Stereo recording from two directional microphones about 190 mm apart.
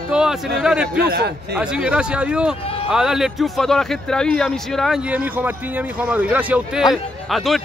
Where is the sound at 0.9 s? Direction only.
60° right (ahead or behind).